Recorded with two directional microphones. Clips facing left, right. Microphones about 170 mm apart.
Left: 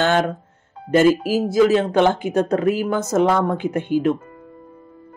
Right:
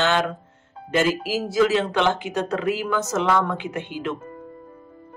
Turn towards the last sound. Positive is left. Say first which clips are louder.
# left 9 dB
turn(degrees=45)  # may be behind; listen again after turning